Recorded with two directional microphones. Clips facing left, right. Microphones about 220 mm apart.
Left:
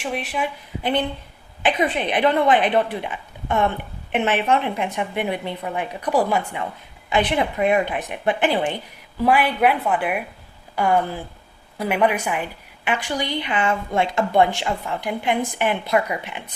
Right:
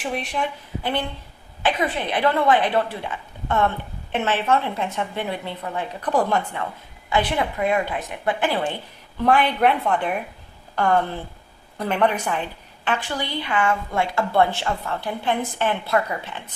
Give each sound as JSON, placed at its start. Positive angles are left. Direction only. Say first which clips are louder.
{"t": 0.0, "sound": "a woman's voice", "louder": "even", "side_deg": 0}
{"t": 0.8, "sound": "a woman's voice", "louder": "left 4 dB", "side_deg": 20}